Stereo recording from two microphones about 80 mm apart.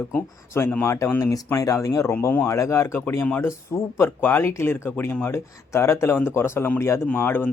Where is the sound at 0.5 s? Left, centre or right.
Left.